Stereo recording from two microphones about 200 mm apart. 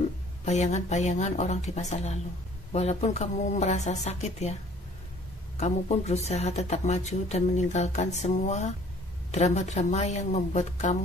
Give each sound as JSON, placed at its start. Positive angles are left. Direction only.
{"t": 0.5, "sound": "speech", "side_deg": 35}
{"t": 5.6, "sound": "speech", "side_deg": 35}